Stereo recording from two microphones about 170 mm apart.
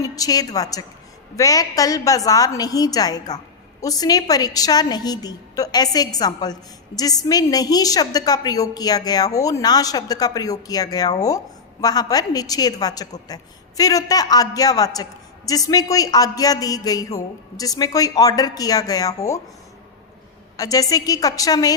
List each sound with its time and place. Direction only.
0.0 s a woman's voice: 20° left (ahead or behind)
20.6 s a woman's voice: 20° left (ahead or behind)